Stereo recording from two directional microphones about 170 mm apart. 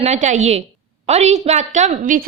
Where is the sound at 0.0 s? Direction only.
45° right (ahead or behind).